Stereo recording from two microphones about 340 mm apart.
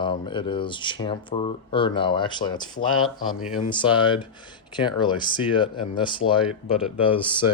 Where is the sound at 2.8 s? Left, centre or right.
Left.